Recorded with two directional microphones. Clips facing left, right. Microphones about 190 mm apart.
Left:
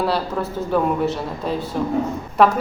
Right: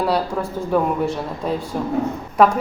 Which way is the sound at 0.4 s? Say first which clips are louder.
Right 1 dB; 5° right (ahead or behind).